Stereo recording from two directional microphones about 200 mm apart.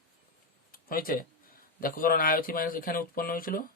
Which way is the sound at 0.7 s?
45° left (ahead or behind).